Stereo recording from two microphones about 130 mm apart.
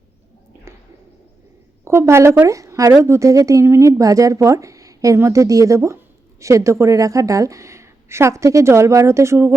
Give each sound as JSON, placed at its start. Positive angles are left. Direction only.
{"t": 1.8, "sound": "a woman's voice", "side_deg": -20}